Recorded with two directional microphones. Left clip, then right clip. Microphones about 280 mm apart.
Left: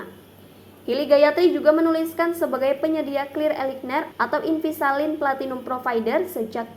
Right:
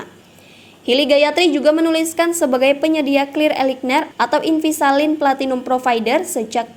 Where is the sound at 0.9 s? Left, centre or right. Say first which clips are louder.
Right 3 dB; right.